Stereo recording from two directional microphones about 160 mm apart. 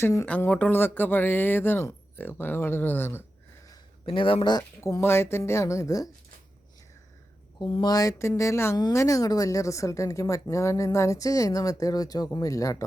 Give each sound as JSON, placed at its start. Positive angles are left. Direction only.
{"t": 0.0, "sound": "speech", "side_deg": 15}
{"t": 3.7, "sound": "a woman's voice", "side_deg": 35}
{"t": 7.6, "sound": "a woman's voice", "side_deg": 25}